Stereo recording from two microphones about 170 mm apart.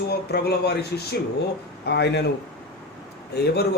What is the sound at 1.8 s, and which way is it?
Speech, 80° left.